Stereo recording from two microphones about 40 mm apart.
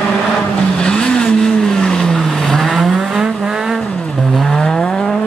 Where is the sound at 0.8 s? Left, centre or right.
Left.